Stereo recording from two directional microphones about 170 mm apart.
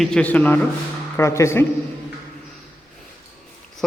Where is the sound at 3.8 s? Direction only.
Centre (ahead or behind).